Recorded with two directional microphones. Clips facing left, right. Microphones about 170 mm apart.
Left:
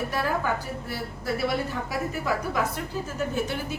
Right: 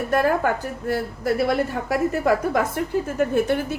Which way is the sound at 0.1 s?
55° right (ahead or behind).